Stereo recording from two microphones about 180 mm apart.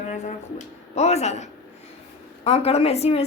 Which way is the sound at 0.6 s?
40° left (ahead or behind).